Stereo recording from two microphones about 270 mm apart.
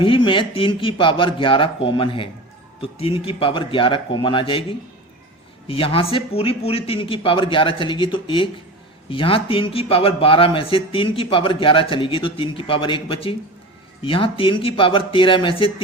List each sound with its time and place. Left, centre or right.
0.0 s speech: centre
5.6 s speech: centre